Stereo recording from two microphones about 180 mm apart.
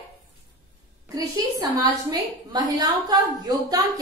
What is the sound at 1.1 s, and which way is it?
A woman's voice, 20° right (ahead or behind).